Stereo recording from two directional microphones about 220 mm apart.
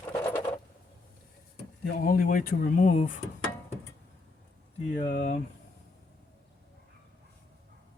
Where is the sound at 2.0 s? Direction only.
40° left (ahead or behind).